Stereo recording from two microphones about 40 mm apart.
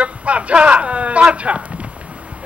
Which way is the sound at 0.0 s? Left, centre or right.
Right.